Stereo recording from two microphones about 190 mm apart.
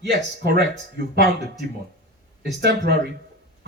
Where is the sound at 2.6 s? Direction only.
65° right (ahead or behind).